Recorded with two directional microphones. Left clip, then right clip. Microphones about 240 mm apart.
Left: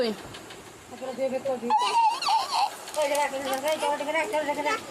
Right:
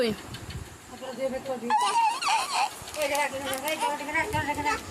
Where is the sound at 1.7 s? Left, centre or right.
Centre.